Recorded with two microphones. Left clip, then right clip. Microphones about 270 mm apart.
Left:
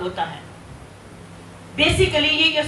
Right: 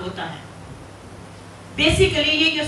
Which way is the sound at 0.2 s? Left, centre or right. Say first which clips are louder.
Left 6 dB; centre.